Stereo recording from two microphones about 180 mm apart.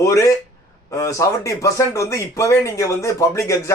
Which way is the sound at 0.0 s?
15° left (ahead or behind).